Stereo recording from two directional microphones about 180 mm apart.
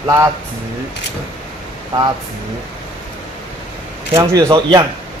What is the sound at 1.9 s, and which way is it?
Speech, 25° right (ahead or behind).